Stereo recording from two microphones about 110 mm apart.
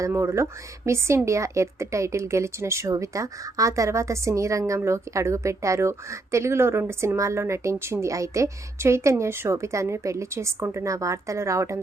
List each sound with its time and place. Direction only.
0.0 s a woman's voice: 25° right (ahead or behind)